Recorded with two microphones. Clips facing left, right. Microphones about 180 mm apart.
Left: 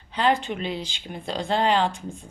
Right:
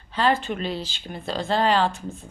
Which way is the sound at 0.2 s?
15° left (ahead or behind).